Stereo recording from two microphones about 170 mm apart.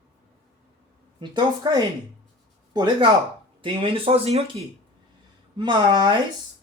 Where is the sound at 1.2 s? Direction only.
25° right (ahead or behind).